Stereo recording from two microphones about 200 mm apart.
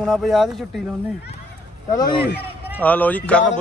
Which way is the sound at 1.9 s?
20° left (ahead or behind).